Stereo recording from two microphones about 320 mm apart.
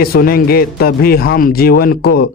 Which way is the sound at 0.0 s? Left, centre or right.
Left.